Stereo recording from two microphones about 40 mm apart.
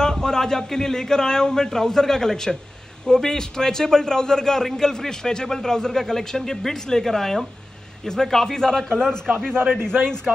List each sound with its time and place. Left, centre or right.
0.0 s a man's voice: centre